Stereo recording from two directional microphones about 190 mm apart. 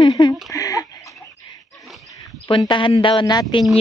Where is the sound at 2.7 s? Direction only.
25° left (ahead or behind).